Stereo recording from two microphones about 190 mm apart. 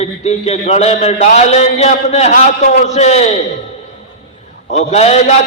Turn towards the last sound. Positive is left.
turn(degrees=35)  # may be behind; listen again after turning